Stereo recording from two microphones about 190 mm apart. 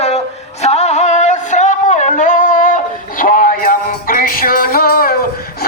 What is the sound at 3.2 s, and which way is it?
Music, 45° left (ahead or behind).